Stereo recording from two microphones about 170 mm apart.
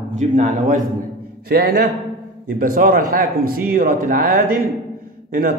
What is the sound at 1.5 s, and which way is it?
A man's voice, 65° right (ahead or behind).